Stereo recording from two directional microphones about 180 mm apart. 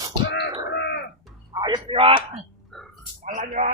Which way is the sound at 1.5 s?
25° right (ahead or behind).